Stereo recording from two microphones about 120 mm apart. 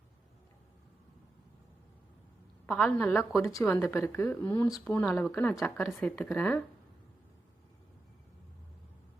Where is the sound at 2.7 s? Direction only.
10° left (ahead or behind).